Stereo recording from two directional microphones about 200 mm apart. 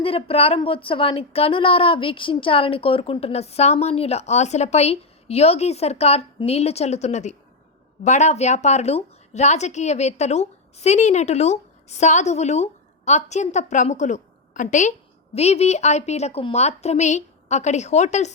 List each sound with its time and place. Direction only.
0.0 s a woman's voice: 30° left (ahead or behind)